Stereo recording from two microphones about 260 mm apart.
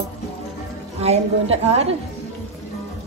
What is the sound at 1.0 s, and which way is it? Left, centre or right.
Speech, right.